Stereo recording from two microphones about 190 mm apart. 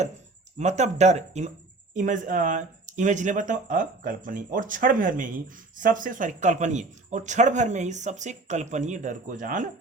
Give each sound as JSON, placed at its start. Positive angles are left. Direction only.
{"t": 0.6, "sound": "speech", "side_deg": -35}